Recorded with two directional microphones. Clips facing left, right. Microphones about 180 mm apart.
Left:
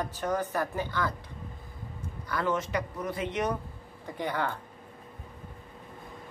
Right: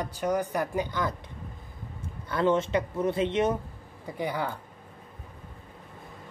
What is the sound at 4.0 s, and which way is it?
Speech, 10° right (ahead or behind).